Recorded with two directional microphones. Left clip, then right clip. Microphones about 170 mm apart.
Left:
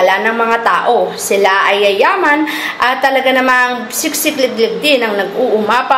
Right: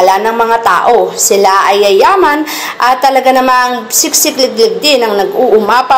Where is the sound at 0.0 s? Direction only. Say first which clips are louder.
Right 3 dB; 25° right (ahead or behind).